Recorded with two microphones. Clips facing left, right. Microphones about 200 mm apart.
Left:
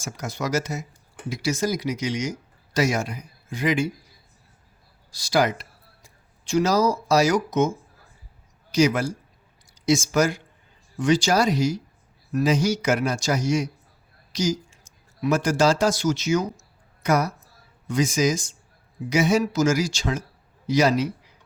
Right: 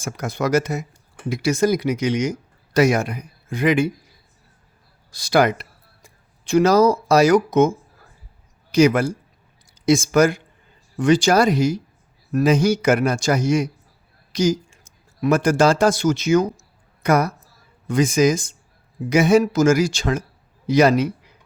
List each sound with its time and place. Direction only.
0.0 s speech: 55° right (ahead or behind)
5.1 s speech: 55° right (ahead or behind)
8.7 s speech: 55° right (ahead or behind)